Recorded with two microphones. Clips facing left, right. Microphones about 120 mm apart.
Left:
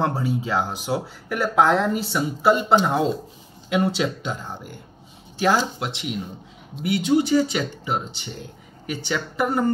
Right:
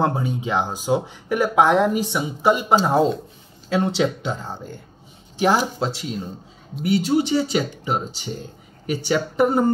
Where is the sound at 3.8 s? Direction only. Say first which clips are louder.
Right 1 dB; 25° right (ahead or behind).